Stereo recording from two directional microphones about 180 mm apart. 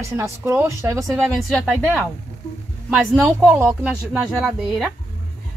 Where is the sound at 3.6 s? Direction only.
15° right (ahead or behind).